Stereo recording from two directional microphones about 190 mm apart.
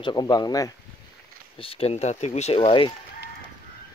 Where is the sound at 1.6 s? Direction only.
30° left (ahead or behind).